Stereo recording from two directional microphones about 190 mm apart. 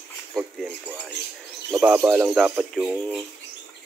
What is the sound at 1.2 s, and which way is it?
Speech, 60° left (ahead or behind).